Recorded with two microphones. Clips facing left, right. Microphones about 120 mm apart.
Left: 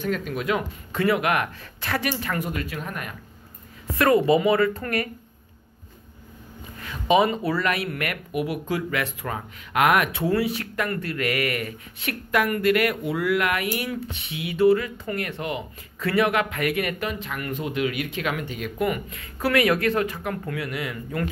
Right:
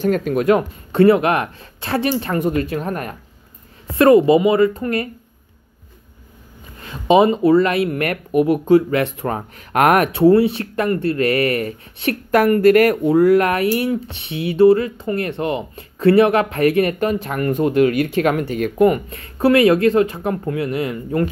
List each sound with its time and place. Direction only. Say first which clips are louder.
0.1 s speech: right 9 dB; 50° right (ahead or behind)
4.0 s speech: right 7 dB; 25° right (ahead or behind)
6.8 s speech: right 6 dB; 30° right (ahead or behind)
8.0 s speech: right 10 dB; 40° right (ahead or behind)
10.2 s speech: right 11 dB; 30° right (ahead or behind); by 13.1 s 45° right (ahead or behind)
13.1 s speech: right 12 dB; 35° right (ahead or behind)